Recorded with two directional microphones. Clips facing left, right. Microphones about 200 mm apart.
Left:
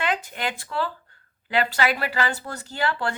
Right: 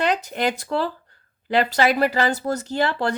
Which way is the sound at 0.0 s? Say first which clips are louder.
Right 5 dB; 40° right (ahead or behind).